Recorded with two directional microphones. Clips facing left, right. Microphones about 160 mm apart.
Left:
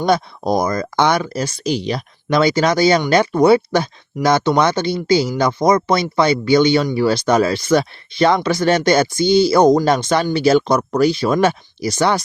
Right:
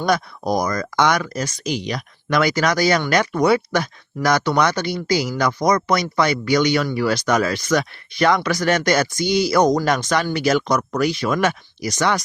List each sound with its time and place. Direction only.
0.0 s speech: 25° left (ahead or behind)